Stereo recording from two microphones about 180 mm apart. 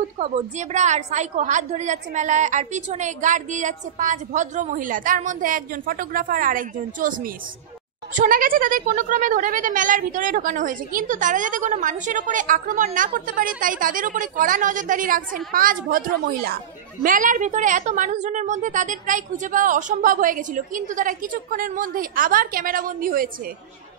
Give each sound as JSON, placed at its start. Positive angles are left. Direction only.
{"t": 0.2, "sound": "speech", "side_deg": -40}